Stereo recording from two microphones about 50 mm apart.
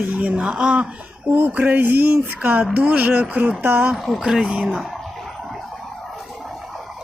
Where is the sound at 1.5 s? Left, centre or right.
Right.